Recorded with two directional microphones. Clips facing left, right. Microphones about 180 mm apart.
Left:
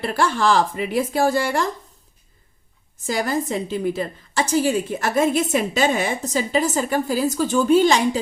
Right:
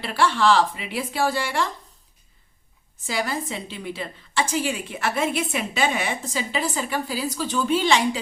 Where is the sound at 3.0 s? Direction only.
45° left (ahead or behind).